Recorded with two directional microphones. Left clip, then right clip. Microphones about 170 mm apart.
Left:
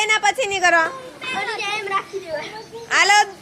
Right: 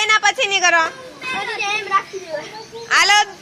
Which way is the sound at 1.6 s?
30° right (ahead or behind).